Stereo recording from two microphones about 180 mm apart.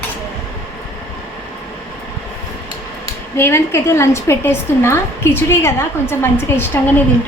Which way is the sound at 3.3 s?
15° left (ahead or behind).